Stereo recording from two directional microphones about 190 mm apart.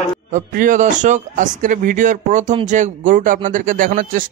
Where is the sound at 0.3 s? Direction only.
45° right (ahead or behind).